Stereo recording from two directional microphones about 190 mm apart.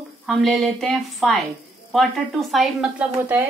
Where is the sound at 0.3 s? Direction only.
Centre (ahead or behind).